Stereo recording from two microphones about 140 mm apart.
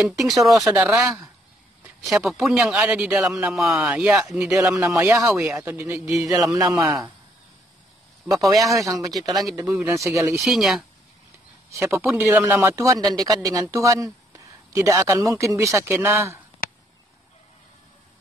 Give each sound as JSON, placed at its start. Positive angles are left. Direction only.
{"t": 0.2, "sound": "a man's voice", "side_deg": 0}
{"t": 2.0, "sound": "a man's voice", "side_deg": 0}
{"t": 4.6, "sound": "speech", "side_deg": -20}
{"t": 8.5, "sound": "speech", "side_deg": -25}
{"t": 10.4, "sound": "a man's voice", "side_deg": 0}
{"t": 11.8, "sound": "speech", "side_deg": -20}